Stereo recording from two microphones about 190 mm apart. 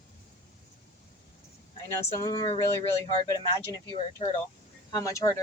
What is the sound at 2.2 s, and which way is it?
Speech, 20° left (ahead or behind).